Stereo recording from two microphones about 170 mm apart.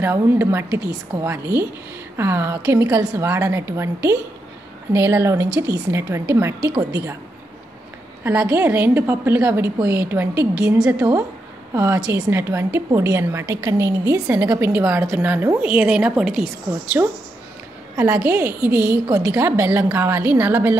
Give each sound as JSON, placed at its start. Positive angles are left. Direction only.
{"t": 0.0, "sound": "a woman's voice", "side_deg": -15}
{"t": 8.2, "sound": "a woman's voice", "side_deg": -10}